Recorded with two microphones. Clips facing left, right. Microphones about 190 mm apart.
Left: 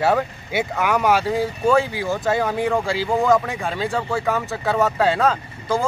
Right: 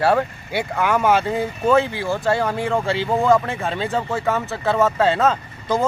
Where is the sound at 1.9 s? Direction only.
15° left (ahead or behind).